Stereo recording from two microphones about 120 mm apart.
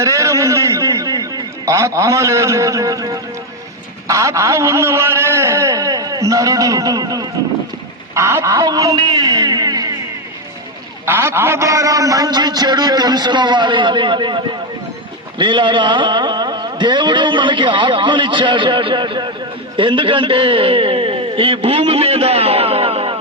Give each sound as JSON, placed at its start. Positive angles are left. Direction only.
{"t": 0.0, "sound": "a man's voice", "side_deg": -25}
{"t": 11.0, "sound": "a man's voice", "side_deg": -20}